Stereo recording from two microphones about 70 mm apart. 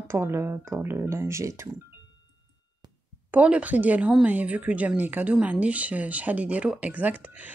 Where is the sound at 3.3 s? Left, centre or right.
Right.